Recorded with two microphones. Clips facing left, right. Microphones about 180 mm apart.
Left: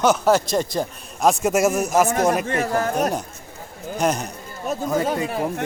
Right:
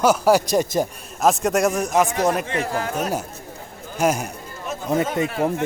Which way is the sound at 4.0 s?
10° right (ahead or behind).